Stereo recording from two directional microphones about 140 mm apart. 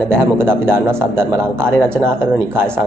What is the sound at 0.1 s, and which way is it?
A man's voice, 15° right (ahead or behind).